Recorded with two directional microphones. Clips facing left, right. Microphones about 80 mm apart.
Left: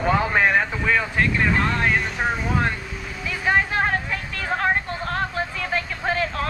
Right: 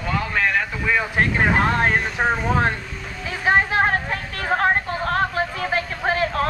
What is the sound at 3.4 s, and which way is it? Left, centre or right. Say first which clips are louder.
Music: right 3 dB; right.